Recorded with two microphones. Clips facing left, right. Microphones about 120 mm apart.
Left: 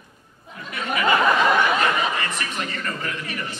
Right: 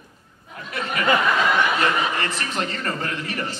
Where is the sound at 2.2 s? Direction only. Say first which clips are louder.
Right 2 dB; 30° right (ahead or behind).